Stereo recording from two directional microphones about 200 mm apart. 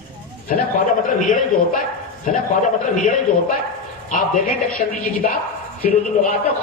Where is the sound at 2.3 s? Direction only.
40° left (ahead or behind).